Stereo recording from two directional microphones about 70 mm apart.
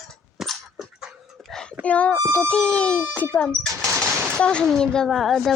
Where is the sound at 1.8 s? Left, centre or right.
Centre.